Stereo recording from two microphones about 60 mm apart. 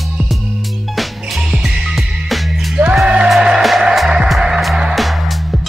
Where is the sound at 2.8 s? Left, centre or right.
Right.